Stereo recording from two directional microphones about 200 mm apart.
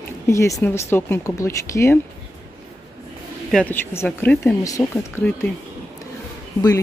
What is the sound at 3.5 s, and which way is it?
Speech, 10° left (ahead or behind).